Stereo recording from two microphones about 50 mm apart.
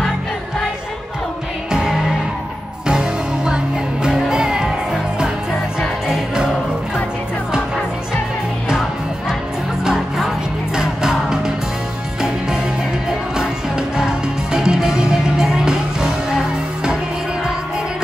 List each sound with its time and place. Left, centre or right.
1.7 s music: centre
5.8 s music: centre
9.9 s music: centre
13.4 s music: centre